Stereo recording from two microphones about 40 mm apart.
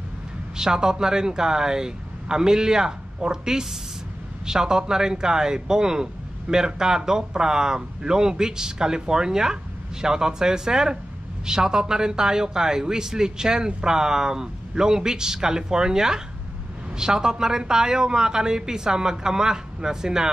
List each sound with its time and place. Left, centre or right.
0.6 s a man's voice: centre